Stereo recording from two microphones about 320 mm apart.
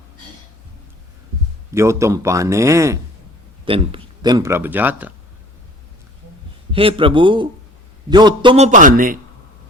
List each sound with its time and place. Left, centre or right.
1.7 s speech: centre
6.7 s a man's voice: centre